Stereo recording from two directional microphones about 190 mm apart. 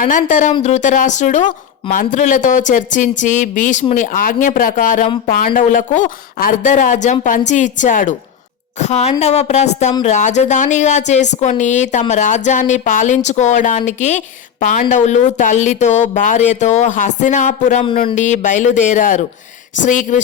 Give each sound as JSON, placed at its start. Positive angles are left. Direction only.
{"t": 0.0, "sound": "a woman's voice", "side_deg": 40}